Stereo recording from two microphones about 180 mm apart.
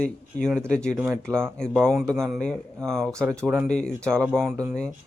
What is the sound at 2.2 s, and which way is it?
A man's voice, 5° left (ahead or behind).